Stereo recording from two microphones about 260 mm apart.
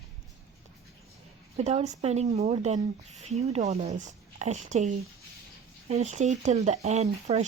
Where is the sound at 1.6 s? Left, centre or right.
Right.